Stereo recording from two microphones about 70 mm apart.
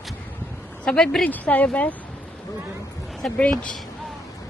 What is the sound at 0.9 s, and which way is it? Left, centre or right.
A woman's voice, centre.